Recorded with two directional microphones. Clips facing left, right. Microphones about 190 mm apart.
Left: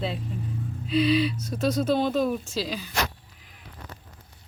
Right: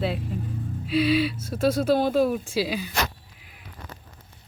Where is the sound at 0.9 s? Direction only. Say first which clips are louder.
Even; 5° right (ahead or behind).